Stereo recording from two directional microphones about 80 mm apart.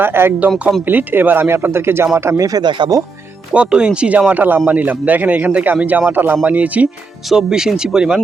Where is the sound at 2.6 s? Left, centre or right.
Right.